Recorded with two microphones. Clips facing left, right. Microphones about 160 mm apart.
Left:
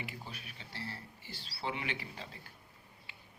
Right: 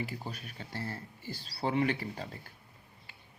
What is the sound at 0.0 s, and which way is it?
Speech, 40° right (ahead or behind).